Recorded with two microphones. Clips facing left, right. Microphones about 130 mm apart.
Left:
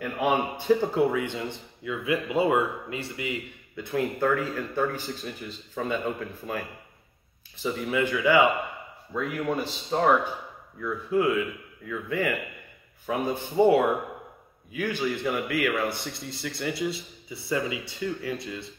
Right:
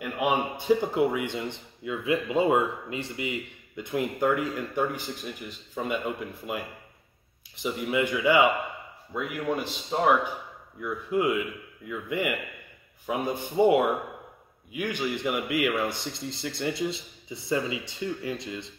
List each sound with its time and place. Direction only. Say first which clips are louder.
0.0 s speech: left 1 dB; 15° right (ahead or behind)
9.4 s speech: left 1 dB; 5° right (ahead or behind); by 18.7 s 20° right (ahead or behind)